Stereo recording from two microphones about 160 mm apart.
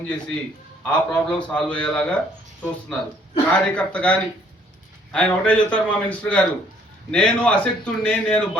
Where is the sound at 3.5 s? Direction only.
5° left (ahead or behind).